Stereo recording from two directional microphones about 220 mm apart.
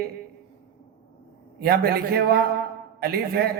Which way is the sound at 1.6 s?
45° right (ahead or behind).